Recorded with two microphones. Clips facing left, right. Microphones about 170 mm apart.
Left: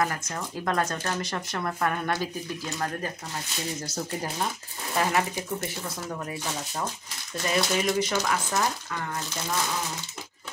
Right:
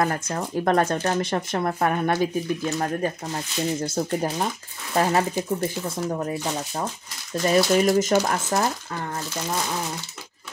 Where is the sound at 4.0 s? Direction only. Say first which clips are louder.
Right 4 dB; 40° right (ahead or behind).